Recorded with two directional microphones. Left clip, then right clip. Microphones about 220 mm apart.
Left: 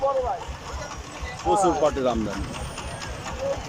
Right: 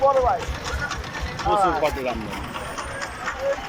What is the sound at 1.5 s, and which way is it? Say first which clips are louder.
Speech: right 1 dB; 10° left (ahead or behind).